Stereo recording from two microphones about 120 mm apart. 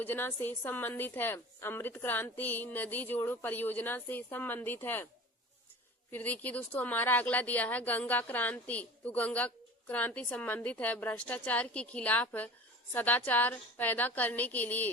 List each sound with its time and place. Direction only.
0.0 s speech: 15° left (ahead or behind)
6.1 s speech: 15° left (ahead or behind)